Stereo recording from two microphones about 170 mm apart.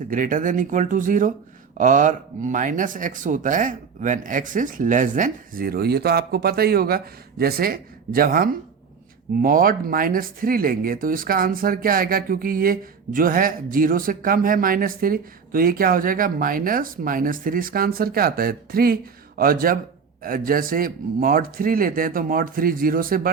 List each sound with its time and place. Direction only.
0.1 s speech: 50° right (ahead or behind)